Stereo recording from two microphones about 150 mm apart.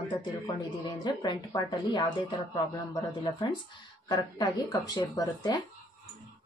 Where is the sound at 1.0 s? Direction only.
30° left (ahead or behind).